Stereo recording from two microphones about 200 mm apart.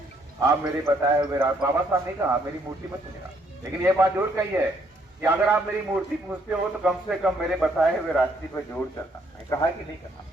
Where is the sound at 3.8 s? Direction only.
10° right (ahead or behind); by 8.8 s 5° left (ahead or behind).